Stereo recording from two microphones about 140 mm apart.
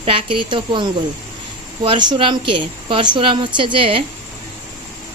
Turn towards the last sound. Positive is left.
turn(degrees=-40)  # may be behind; listen again after turning